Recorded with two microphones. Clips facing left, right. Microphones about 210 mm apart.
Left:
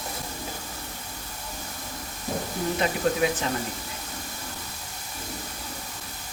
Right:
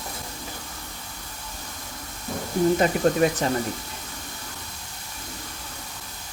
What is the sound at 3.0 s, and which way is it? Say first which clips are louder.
Speech: right 3 dB; 40° right (ahead or behind).